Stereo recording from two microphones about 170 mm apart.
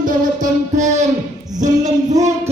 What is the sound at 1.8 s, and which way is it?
Music, 20° right (ahead or behind).